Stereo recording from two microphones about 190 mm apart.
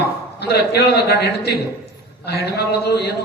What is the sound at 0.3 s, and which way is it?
A man's voice, 60° left (ahead or behind).